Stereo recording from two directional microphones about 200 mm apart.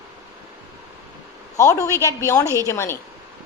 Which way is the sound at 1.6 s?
15° left (ahead or behind).